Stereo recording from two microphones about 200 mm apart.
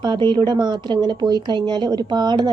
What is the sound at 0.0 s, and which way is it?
Speech, 20° right (ahead or behind).